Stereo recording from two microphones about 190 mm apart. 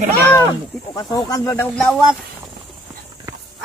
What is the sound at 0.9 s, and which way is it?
Speech, 20° left (ahead or behind).